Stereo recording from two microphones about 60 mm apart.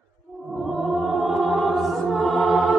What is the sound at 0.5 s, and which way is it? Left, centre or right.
Music, centre.